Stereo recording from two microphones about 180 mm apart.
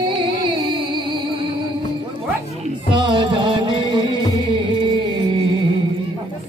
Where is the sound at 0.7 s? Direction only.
25° right (ahead or behind).